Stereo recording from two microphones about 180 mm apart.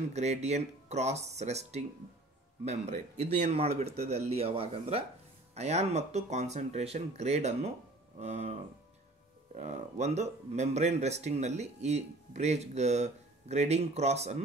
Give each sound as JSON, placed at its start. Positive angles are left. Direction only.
{"t": 0.1, "sound": "speech", "side_deg": -40}
{"t": 9.6, "sound": "speech", "side_deg": -40}